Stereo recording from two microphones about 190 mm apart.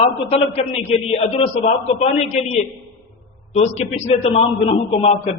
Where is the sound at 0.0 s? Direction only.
30° left (ahead or behind).